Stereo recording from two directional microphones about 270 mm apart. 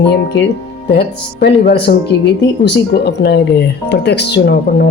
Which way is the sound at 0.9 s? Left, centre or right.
Left.